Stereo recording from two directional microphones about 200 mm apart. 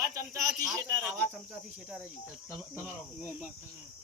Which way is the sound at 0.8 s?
10° right (ahead or behind).